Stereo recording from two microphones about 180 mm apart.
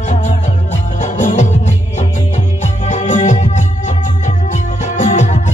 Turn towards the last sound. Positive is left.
turn(degrees=40)  # may be behind; listen again after turning